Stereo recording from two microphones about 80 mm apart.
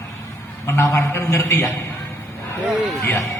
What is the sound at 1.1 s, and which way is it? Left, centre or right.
Speech, left.